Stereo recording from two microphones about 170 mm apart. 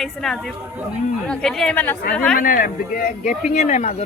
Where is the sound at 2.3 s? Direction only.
55° left (ahead or behind).